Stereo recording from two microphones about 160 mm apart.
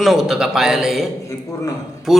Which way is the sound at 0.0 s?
Centre (ahead or behind).